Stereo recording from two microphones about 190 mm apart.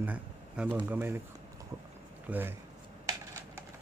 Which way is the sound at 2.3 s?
10° right (ahead or behind).